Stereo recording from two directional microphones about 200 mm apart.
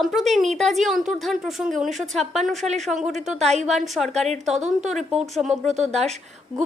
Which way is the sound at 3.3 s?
35° right (ahead or behind).